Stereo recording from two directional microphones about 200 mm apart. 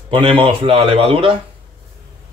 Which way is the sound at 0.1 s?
25° right (ahead or behind).